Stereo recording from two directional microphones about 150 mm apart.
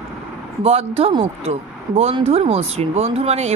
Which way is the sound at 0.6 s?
40° right (ahead or behind).